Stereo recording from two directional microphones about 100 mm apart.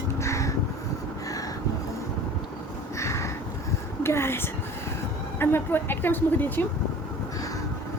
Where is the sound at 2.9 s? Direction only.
30° left (ahead or behind).